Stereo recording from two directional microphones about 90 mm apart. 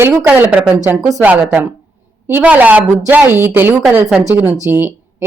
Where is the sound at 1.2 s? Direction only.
15° right (ahead or behind).